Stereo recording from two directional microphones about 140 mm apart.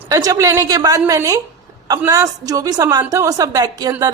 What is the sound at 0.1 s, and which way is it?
Speech, 25° right (ahead or behind).